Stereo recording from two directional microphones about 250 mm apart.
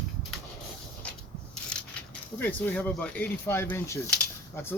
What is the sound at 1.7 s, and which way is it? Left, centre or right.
Speech, centre.